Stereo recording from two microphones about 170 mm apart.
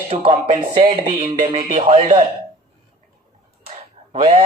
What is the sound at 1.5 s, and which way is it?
Speech, 50° right (ahead or behind).